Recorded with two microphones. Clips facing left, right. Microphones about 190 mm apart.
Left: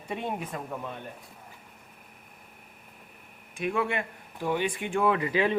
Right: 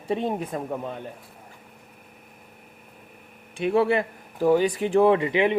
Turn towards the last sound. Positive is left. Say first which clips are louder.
# right 6 dB
turn(degrees=-20)  # may be behind; listen again after turning